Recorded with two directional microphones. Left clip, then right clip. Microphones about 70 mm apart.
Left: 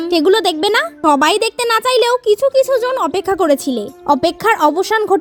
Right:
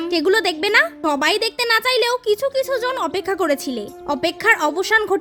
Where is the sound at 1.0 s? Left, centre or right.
Left.